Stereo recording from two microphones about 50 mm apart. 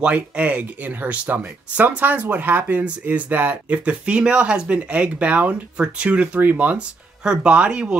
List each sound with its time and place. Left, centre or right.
0.0 s speech: right
7.2 s speech: right